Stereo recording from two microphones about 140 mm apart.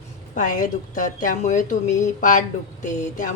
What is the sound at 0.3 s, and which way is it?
Speech, 65° left (ahead or behind).